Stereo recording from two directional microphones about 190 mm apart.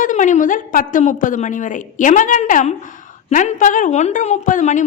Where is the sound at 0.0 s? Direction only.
40° left (ahead or behind).